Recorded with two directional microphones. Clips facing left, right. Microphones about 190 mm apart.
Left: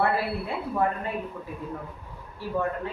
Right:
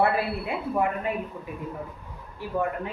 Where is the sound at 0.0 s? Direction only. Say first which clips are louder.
Right 2 dB; 15° right (ahead or behind).